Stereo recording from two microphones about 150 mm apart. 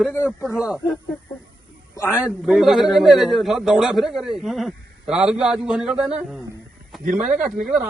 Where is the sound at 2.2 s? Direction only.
Centre (ahead or behind).